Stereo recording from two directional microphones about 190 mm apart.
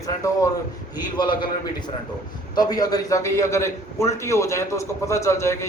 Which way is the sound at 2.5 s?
20° left (ahead or behind).